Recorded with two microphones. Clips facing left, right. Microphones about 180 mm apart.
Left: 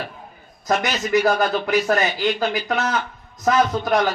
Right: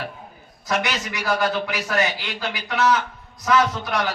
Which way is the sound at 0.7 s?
45° left (ahead or behind).